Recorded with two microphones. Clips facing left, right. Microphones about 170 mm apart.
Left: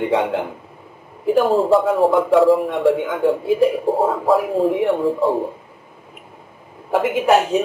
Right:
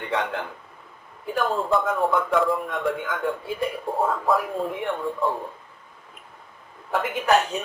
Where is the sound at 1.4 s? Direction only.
30° left (ahead or behind).